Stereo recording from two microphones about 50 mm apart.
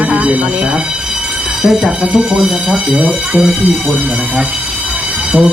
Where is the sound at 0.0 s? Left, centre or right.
Right.